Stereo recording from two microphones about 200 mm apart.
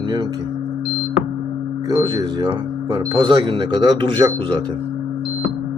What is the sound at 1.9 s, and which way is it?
Speech, 15° right (ahead or behind).